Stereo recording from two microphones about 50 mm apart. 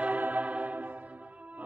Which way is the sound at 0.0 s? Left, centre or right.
Right.